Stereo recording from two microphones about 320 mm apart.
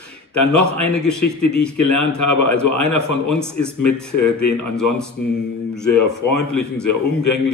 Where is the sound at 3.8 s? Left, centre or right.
Left.